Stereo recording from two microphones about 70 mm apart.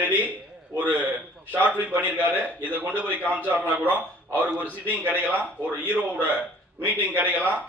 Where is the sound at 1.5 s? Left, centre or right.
Right.